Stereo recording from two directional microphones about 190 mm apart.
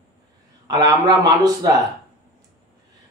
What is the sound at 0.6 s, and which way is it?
Speech, 20° right (ahead or behind).